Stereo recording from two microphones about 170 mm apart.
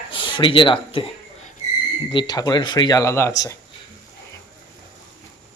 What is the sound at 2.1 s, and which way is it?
A man's voice, 25° left (ahead or behind).